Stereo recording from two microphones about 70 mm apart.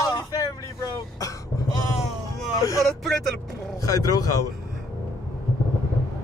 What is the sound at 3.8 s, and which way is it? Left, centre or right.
Speech, left.